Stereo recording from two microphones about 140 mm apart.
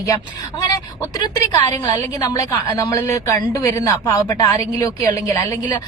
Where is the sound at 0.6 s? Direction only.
30° left (ahead or behind).